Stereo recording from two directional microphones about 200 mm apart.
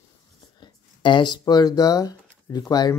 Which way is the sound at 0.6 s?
25° left (ahead or behind).